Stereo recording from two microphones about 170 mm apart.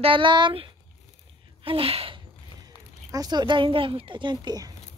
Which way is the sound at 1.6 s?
35° right (ahead or behind).